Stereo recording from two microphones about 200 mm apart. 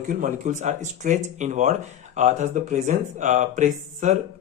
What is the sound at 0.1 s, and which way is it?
A man's voice, 40° right (ahead or behind).